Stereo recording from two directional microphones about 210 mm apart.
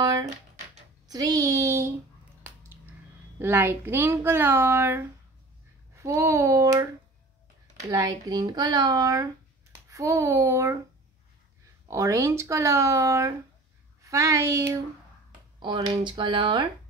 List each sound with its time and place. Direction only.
0.0 s a sound: 15° right (ahead or behind)
1.0 s a woman's voice: 15° right (ahead or behind)
3.3 s a woman's voice: 10° right (ahead or behind)
7.9 s a woman's voice: 15° right (ahead or behind)
11.9 s a woman's voice: 15° right (ahead or behind)